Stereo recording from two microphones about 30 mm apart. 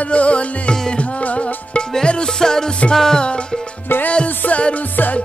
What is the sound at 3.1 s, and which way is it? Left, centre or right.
Music, left.